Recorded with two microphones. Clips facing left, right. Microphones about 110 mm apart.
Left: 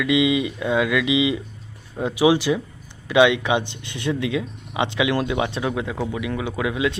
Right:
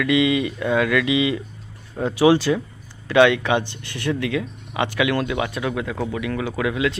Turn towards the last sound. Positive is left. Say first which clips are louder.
# right 1 dB
turn(degrees=20)  # may be behind; listen again after turning